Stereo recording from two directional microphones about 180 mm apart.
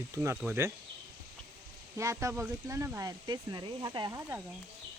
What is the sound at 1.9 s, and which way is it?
Speech, 15° right (ahead or behind).